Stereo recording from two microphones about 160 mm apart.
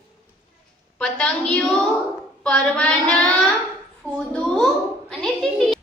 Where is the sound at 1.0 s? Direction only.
5° left (ahead or behind).